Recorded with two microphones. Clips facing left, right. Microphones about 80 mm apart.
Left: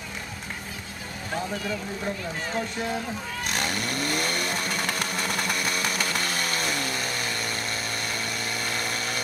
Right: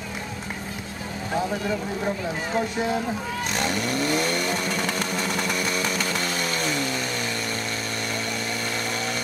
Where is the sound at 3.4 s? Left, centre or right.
Centre.